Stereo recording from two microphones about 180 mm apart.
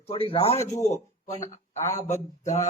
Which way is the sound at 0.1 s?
30° left (ahead or behind).